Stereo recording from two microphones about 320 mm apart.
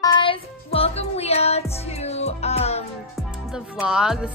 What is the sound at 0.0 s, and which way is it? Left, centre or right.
Music, centre.